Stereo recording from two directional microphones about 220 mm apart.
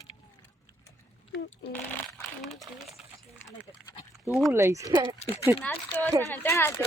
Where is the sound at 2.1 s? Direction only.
Centre (ahead or behind).